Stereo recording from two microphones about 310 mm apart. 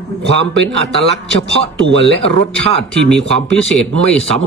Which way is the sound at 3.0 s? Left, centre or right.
Centre.